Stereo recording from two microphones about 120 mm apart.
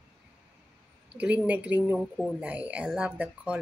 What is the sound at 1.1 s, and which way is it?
A woman's voice, 10° right (ahead or behind).